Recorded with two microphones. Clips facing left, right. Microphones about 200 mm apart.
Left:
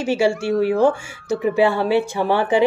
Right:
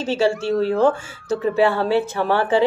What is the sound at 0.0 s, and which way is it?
Speech, 10° left (ahead or behind).